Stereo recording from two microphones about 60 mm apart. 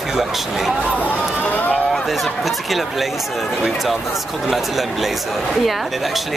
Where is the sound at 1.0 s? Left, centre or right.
Left.